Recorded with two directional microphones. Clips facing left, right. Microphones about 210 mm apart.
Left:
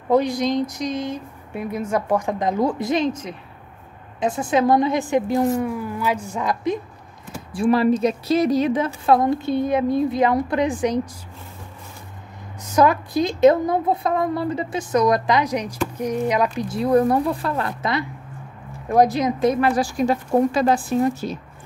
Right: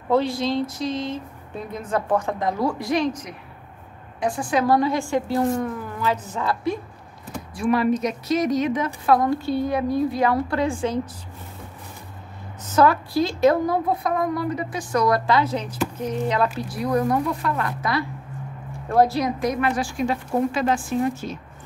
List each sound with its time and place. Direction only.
0.1 s a woman's voice: 15° left (ahead or behind)
7.5 s a woman's voice: 30° left (ahead or behind)
12.6 s a woman's voice: 15° left (ahead or behind)
16.5 s a woman's voice: 25° left (ahead or behind)